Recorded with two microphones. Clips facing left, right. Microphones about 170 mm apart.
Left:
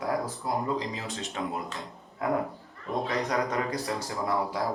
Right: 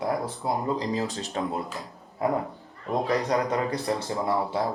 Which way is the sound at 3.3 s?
30° right (ahead or behind).